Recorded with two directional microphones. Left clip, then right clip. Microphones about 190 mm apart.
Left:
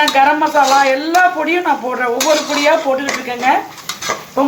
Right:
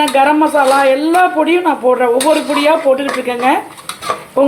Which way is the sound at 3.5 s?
35° right (ahead or behind).